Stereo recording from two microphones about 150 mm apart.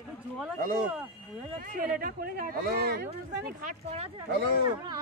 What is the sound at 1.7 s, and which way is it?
Speech, 75° right (ahead or behind).